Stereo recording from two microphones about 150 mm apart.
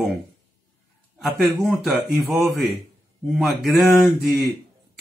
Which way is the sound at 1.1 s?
Centre (ahead or behind).